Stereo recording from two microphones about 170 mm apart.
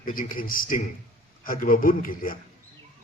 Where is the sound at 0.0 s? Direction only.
55° left (ahead or behind).